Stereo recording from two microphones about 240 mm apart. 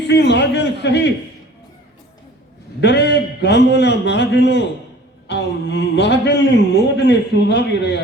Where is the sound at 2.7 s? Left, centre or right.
Left.